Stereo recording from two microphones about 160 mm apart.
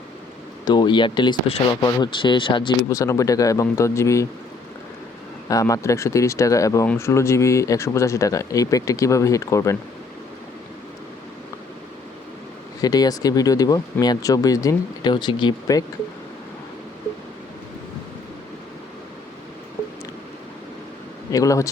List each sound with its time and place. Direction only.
0.6 s speech: 30° left (ahead or behind)
2.9 s speech: 20° left (ahead or behind)
5.5 s speech: 20° left (ahead or behind)
12.8 s speech: 25° left (ahead or behind)
21.2 s speech: 20° left (ahead or behind)